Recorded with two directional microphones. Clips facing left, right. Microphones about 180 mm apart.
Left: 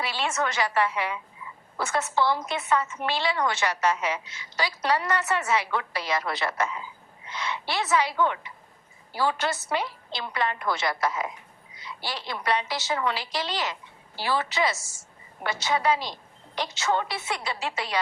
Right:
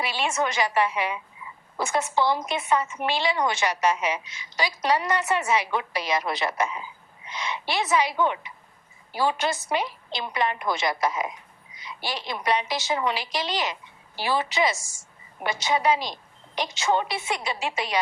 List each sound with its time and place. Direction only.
0.0 s a woman's voice: 15° right (ahead or behind)